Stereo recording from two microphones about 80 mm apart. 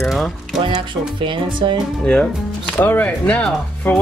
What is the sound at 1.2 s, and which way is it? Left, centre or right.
Speech, right.